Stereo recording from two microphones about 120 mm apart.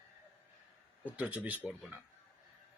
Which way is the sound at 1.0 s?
15° right (ahead or behind).